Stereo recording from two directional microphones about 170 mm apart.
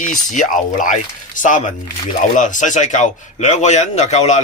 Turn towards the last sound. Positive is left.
turn(degrees=40)  # may be behind; listen again after turning